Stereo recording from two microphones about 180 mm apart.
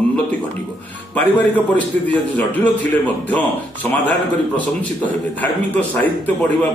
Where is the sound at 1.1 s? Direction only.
10° left (ahead or behind).